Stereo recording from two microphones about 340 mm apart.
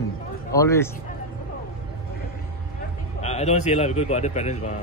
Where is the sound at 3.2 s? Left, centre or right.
Centre.